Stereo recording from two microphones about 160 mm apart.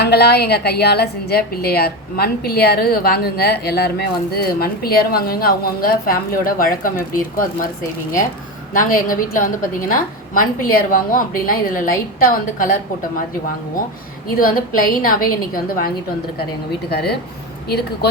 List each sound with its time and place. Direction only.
0.0 s a woman's voice: 90° left; by 7.4 s 60° left (ahead or behind)
8.7 s a woman's voice: 60° left (ahead or behind)
14.3 s a woman's voice: 60° left (ahead or behind)
16.9 s speech: 85° left